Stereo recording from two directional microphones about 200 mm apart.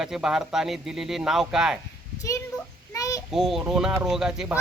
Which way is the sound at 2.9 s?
15° left (ahead or behind).